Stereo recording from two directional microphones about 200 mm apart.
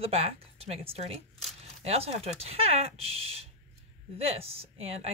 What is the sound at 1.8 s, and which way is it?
Speech, 30° right (ahead or behind).